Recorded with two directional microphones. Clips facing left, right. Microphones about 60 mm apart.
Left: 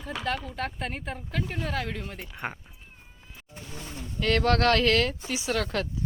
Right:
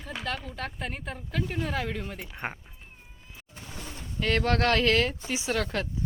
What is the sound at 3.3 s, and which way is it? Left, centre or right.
Pigeon, centre.